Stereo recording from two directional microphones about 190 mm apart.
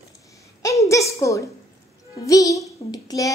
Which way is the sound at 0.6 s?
15° left (ahead or behind).